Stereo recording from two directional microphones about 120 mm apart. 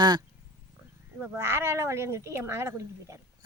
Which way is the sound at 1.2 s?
20° right (ahead or behind).